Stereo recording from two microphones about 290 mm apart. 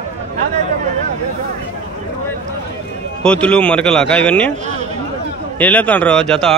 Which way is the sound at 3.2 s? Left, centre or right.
Centre.